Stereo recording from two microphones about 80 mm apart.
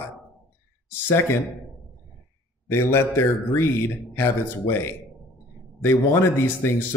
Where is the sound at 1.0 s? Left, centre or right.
Left.